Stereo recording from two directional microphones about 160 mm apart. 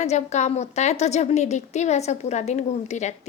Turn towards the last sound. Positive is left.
turn(degrees=45)  # may be behind; listen again after turning